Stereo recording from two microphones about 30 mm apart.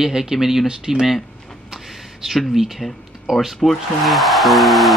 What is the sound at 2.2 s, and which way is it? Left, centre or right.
Speech, centre.